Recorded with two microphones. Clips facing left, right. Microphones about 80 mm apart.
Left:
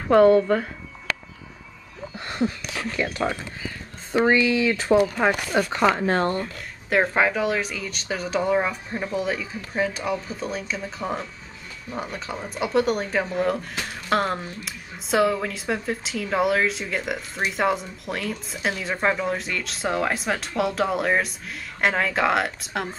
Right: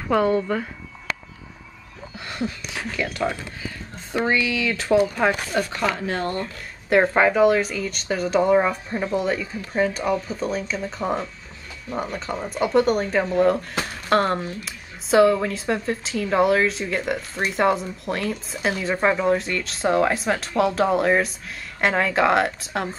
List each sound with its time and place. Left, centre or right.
0.1 s speech: left
2.1 s a sound: left
3.2 s speech: centre
6.0 s speech: left
6.4 s speech: centre